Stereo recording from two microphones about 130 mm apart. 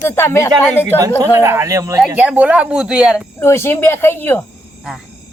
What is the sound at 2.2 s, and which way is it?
Speech, 10° right (ahead or behind).